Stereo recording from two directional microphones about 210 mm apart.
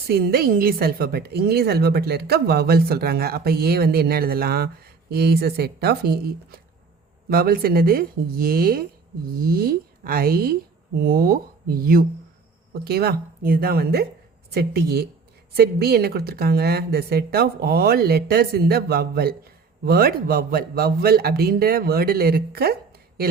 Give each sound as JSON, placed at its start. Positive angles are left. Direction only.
{"t": 0.1, "sound": "speech", "side_deg": -45}
{"t": 7.3, "sound": "speech", "side_deg": -45}